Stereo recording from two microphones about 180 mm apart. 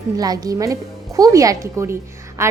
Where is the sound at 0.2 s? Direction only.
20° right (ahead or behind).